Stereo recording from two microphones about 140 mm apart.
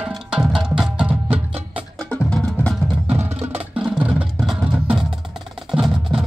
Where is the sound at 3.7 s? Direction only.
5° right (ahead or behind).